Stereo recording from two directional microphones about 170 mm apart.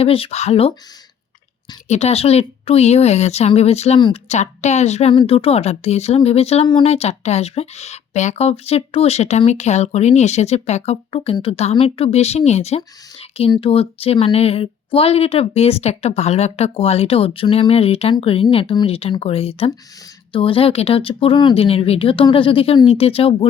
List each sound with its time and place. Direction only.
0.0 s speech: 35° left (ahead or behind)
1.9 s speech: 40° left (ahead or behind)